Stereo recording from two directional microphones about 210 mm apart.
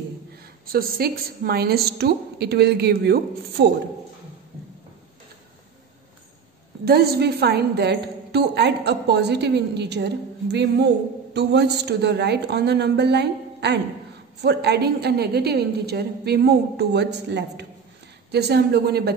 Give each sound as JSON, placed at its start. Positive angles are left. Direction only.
{"t": 0.7, "sound": "a woman's voice", "side_deg": -45}
{"t": 6.8, "sound": "a woman's voice", "side_deg": -50}